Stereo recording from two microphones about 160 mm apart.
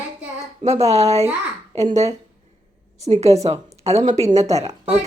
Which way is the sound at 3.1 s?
40° right (ahead or behind).